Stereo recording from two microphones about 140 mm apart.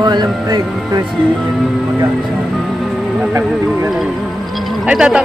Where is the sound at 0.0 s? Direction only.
30° right (ahead or behind).